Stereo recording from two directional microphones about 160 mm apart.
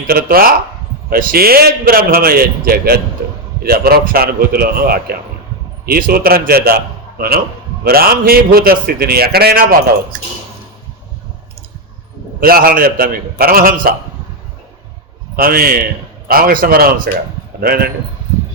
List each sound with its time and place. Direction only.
0.1 s a man's voice: 65° right (ahead or behind)
12.4 s a man's voice: 65° right (ahead or behind)
15.4 s a man's voice: 70° right (ahead or behind)